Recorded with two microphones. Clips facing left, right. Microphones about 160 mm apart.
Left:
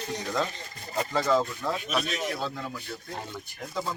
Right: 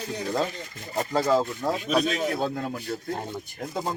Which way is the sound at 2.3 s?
50° right (ahead or behind).